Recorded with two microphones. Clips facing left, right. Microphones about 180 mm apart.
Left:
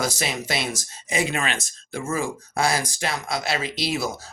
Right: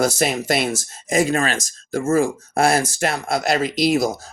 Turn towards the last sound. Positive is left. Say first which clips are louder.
# right 8 dB
turn(degrees=-45)  # may be behind; listen again after turning